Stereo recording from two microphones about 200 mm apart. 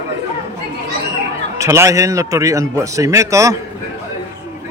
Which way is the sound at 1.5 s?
15° right (ahead or behind).